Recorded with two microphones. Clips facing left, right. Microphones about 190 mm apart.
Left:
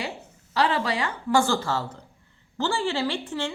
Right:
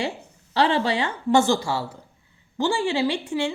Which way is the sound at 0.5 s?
25° right (ahead or behind).